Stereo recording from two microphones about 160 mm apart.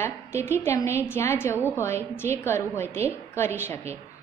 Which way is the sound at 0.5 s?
15° left (ahead or behind).